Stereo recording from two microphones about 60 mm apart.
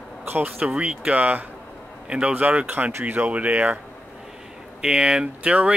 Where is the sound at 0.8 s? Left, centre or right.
Right.